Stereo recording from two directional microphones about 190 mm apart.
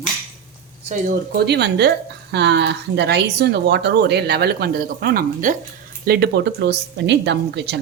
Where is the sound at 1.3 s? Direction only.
60° right (ahead or behind).